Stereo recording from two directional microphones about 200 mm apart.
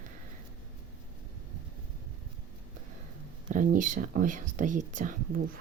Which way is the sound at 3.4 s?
40° right (ahead or behind).